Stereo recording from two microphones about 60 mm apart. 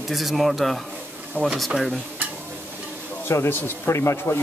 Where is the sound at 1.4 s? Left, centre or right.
Left.